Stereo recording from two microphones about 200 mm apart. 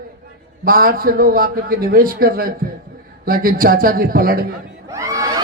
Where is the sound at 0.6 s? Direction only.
45° right (ahead or behind).